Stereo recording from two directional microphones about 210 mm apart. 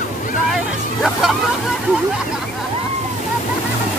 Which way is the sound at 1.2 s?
5° right (ahead or behind).